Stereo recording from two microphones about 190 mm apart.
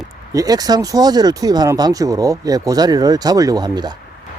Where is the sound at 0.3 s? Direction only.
20° right (ahead or behind).